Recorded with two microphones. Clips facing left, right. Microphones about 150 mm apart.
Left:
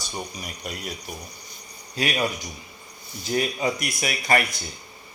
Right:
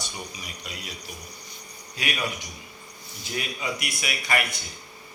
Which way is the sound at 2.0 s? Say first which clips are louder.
Left 5 dB; 35° left (ahead or behind).